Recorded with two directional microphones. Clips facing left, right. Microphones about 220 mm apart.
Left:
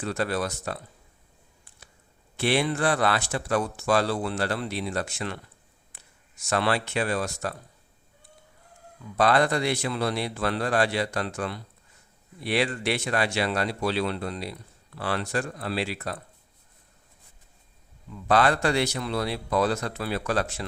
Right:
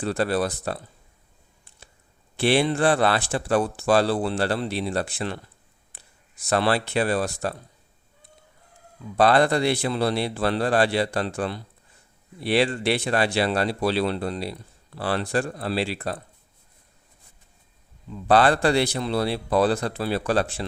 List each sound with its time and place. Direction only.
0.0 s speech: 35° right (ahead or behind)
2.3 s speech: 30° right (ahead or behind)
9.1 s speech: 30° right (ahead or behind)
18.1 s speech: 30° right (ahead or behind)